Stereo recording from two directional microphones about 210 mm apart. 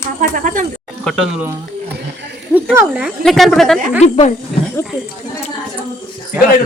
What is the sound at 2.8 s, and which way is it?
Speech, 5° right (ahead or behind).